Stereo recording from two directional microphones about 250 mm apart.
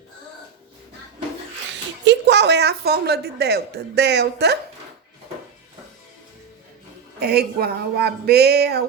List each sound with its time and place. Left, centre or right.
1.7 s a woman's voice: right
7.2 s a woman's voice: right